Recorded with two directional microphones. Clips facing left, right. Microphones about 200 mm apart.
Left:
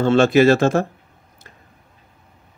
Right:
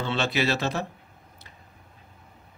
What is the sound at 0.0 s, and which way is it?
Speech, 50° left (ahead or behind).